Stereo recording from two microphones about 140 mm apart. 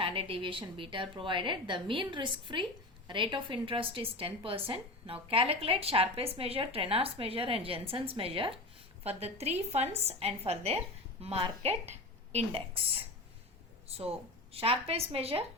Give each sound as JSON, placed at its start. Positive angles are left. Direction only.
{"t": 0.0, "sound": "a woman's voice", "side_deg": -40}
{"t": 13.8, "sound": "a woman's voice", "side_deg": -45}